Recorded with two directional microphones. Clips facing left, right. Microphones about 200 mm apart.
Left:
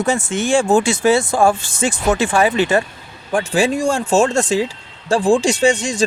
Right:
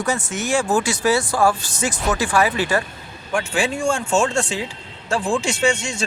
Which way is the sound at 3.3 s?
35° left (ahead or behind).